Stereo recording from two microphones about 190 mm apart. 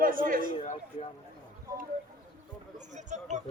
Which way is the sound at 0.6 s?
35° left (ahead or behind).